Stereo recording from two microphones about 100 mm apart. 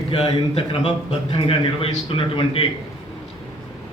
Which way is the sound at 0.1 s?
75° left (ahead or behind).